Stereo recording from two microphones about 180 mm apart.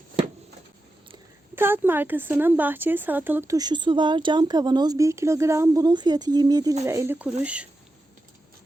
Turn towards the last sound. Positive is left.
turn(degrees=-5)  # may be behind; listen again after turning